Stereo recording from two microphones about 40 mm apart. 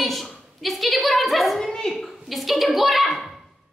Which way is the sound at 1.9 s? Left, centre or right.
Centre.